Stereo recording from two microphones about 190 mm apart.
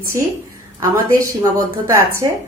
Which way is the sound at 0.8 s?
15° right (ahead or behind).